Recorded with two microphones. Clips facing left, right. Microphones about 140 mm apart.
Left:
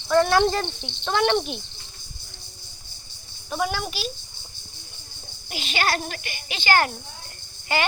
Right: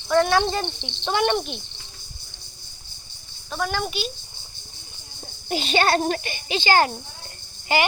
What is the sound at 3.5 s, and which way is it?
Speech, 5° left (ahead or behind).